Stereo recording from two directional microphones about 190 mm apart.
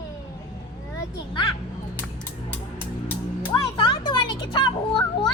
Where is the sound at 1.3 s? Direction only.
25° left (ahead or behind).